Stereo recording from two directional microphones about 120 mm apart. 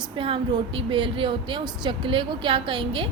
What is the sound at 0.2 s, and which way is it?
A woman's voice, 45° right (ahead or behind).